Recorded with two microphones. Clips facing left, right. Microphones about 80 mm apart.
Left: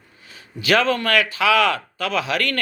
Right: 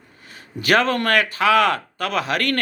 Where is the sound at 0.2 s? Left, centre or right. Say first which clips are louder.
Right 2 dB; right.